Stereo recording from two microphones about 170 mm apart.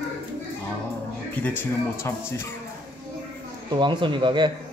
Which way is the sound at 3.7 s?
25° right (ahead or behind).